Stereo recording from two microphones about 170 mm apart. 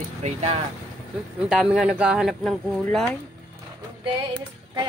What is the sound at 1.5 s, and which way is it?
Speech, 5° right (ahead or behind).